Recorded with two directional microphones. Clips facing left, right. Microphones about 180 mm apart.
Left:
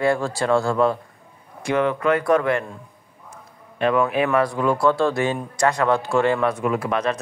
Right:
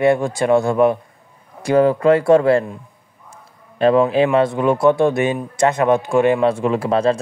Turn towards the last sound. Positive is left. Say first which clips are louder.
# right 5 dB
turn(degrees=-30)  # may be behind; listen again after turning